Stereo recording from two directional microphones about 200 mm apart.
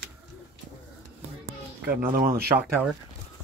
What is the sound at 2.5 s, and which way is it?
Speech, 10° right (ahead or behind).